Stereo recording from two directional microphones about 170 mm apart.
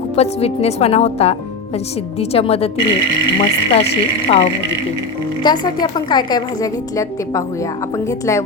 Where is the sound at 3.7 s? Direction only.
35° left (ahead or behind).